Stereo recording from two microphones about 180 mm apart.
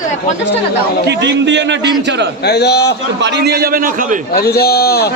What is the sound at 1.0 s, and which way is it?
Speech, 75° right (ahead or behind).